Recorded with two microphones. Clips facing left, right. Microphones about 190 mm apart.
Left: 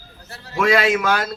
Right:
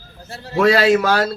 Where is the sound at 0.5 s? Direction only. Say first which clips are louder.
Right 4 dB; 35° right (ahead or behind).